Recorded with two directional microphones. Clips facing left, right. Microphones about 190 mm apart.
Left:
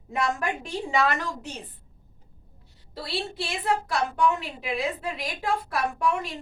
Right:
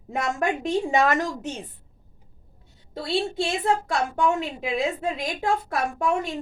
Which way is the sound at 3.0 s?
25° right (ahead or behind).